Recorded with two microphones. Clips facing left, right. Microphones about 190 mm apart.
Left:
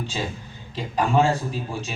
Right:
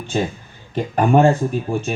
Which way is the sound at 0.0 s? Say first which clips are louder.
Right 7 dB; 55° right (ahead or behind).